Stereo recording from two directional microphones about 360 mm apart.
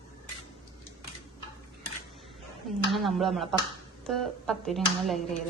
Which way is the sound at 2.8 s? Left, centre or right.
Centre.